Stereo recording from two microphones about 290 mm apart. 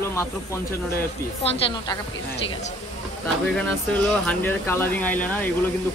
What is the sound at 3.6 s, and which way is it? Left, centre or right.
Speech, centre.